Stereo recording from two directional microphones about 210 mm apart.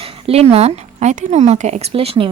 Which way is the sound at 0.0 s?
30° right (ahead or behind).